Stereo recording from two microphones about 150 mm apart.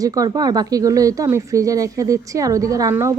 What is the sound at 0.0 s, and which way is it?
Speech, 25° right (ahead or behind).